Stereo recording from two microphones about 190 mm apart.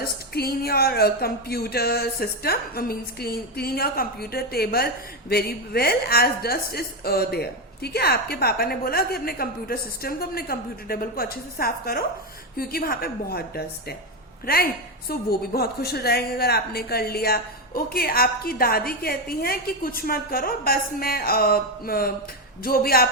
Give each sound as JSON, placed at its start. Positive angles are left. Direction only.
{"t": 0.0, "sound": "a woman's voice", "side_deg": 55}